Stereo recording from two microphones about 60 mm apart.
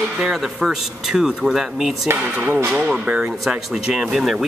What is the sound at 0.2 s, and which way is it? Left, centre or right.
Speech, centre.